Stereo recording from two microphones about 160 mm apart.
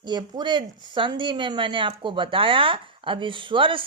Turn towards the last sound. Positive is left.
turn(degrees=-30)  # may be behind; listen again after turning